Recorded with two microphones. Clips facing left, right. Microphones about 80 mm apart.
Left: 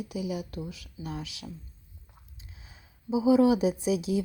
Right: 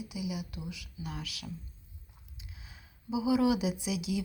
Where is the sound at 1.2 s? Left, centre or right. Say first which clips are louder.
Left 2 dB; left.